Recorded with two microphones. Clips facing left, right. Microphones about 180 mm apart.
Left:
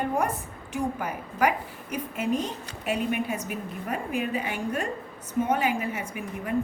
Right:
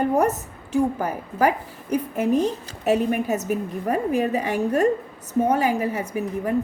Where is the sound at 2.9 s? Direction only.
40° right (ahead or behind).